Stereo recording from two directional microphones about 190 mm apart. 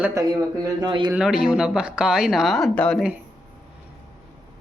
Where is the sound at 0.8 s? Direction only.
25° right (ahead or behind).